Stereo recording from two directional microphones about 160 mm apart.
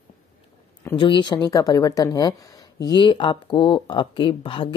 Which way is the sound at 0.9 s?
30° left (ahead or behind).